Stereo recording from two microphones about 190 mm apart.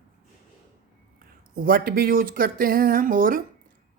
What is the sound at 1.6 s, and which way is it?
Speech, 50° right (ahead or behind).